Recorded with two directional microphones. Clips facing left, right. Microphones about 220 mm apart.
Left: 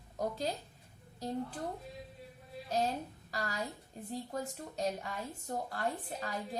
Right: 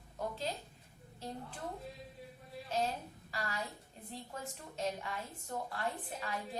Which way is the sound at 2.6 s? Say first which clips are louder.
Left 2 dB; 40° left (ahead or behind).